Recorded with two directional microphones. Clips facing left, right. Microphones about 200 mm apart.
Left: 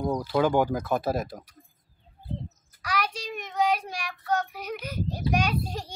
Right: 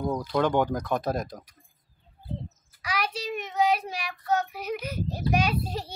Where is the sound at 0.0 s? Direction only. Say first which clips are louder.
Left 1 dB; 10° left (ahead or behind).